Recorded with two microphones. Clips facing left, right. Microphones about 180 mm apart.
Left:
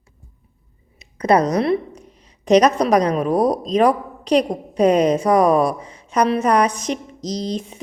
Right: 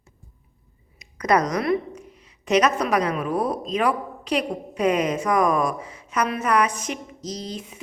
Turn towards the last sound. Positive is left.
turn(degrees=35)  # may be behind; listen again after turning